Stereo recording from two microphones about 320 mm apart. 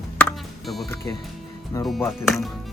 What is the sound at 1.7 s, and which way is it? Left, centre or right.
Speech, centre.